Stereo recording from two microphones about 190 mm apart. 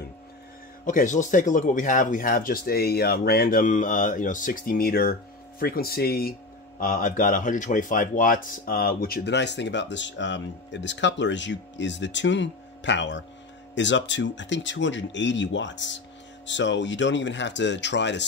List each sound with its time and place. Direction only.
0.8 s speech: 40° left (ahead or behind); by 18.2 s 65° left (ahead or behind)